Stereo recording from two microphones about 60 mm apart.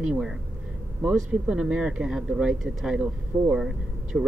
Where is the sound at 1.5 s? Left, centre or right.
Centre.